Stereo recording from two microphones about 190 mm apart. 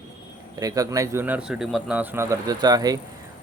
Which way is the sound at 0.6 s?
20° right (ahead or behind).